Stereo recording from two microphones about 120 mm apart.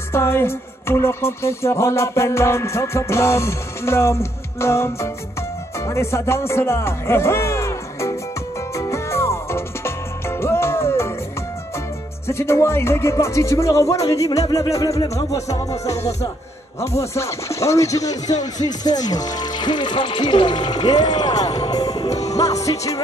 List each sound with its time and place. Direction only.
0.1 s music: 20° left (ahead or behind)
5.8 s speech: 25° left (ahead or behind)
8.7 s music: 25° left (ahead or behind)
12.3 s music: 20° left (ahead or behind)
18.3 s speech: 30° left (ahead or behind)
22.3 s music: 30° left (ahead or behind)